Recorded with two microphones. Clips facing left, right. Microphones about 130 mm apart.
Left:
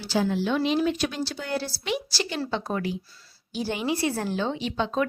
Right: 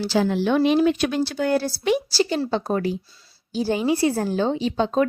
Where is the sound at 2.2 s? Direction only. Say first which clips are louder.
Right 7 dB; 35° right (ahead or behind).